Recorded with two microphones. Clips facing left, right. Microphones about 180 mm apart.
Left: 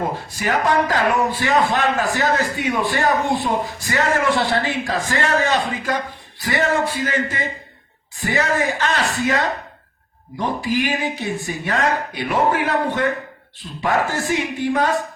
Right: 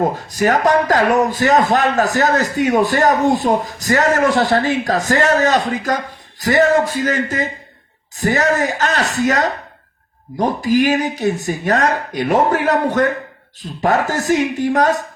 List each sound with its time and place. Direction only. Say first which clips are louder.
0.0 s speech: right 7 dB; 45° right (ahead or behind)